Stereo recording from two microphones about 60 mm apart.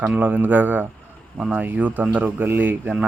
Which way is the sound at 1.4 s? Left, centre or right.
Centre.